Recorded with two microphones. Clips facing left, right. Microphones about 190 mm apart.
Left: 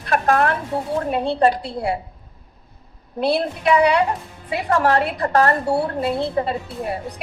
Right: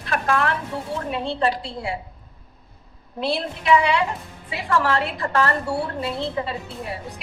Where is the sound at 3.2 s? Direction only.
50° left (ahead or behind).